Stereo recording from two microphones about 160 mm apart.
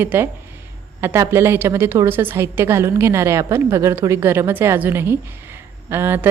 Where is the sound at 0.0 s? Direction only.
10° right (ahead or behind).